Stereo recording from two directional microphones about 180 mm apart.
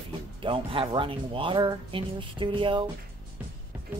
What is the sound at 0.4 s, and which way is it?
Speech, 30° right (ahead or behind).